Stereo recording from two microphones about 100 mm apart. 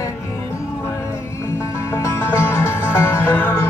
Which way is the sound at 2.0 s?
25° left (ahead or behind).